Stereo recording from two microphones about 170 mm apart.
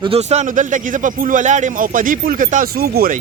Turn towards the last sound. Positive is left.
turn(degrees=-60)  # may be behind; listen again after turning